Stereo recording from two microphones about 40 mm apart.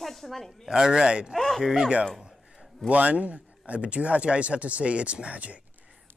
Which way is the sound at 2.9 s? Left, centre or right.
Right.